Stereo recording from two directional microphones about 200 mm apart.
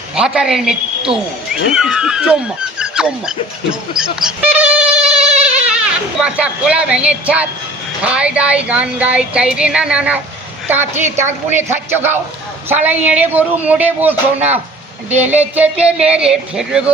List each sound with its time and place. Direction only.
0.2 s speech: 5° right (ahead or behind)
3.9 s a sound: 5° right (ahead or behind)
6.2 s speech: 5° right (ahead or behind)